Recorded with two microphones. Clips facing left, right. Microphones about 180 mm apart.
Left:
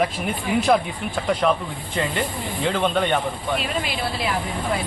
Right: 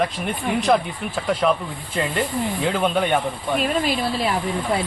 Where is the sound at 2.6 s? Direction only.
5° right (ahead or behind).